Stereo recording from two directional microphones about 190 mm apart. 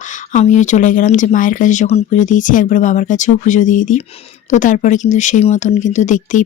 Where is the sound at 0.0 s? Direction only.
40° left (ahead or behind).